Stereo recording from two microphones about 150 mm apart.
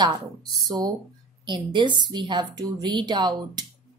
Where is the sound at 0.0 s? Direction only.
30° right (ahead or behind).